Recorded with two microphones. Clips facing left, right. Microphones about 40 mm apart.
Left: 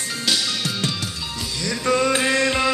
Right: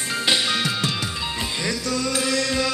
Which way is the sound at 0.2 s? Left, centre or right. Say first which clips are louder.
Right 2 dB; right.